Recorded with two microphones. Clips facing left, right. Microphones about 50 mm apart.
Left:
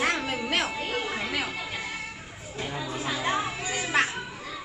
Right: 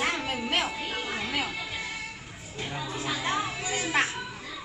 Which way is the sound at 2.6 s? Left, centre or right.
Centre.